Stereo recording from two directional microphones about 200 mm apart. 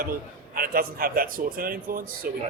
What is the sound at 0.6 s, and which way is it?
Speech, 45° right (ahead or behind).